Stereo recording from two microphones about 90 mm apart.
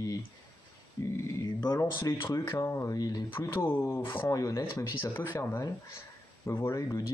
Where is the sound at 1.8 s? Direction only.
35° left (ahead or behind).